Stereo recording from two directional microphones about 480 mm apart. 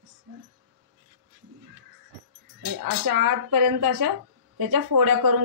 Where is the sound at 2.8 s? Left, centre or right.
Right.